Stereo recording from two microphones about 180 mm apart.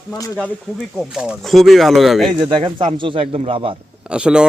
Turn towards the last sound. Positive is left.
turn(degrees=-5)  # may be behind; listen again after turning